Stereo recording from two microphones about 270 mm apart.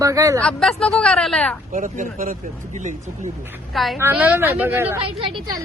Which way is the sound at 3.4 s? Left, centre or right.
Centre.